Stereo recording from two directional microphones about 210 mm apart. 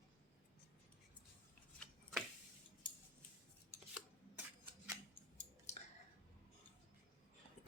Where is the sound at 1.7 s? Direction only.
5° left (ahead or behind).